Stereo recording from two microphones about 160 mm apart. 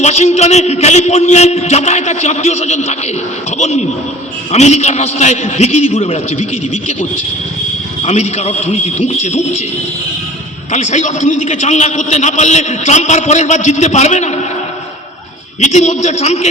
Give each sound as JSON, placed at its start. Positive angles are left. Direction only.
{"t": 0.0, "sound": "a man's voice", "side_deg": 45}
{"t": 8.0, "sound": "a man's voice", "side_deg": 45}
{"t": 10.7, "sound": "a man's voice", "side_deg": 45}
{"t": 15.6, "sound": "a man's voice", "side_deg": 45}